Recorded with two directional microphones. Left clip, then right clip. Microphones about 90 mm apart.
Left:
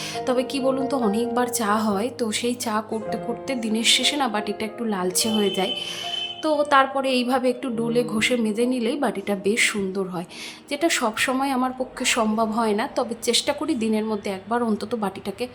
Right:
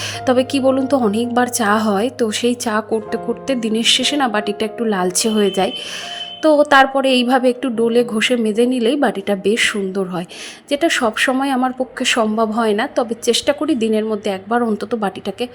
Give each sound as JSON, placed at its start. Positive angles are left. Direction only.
{"t": 0.3, "sound": "a woman's voice", "side_deg": -65}
{"t": 1.1, "sound": "a woman's voice", "side_deg": -55}